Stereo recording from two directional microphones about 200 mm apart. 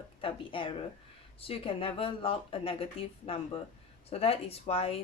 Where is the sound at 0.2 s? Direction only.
25° left (ahead or behind).